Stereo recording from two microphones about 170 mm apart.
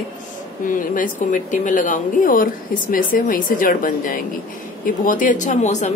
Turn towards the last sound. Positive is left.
turn(degrees=45)  # may be behind; listen again after turning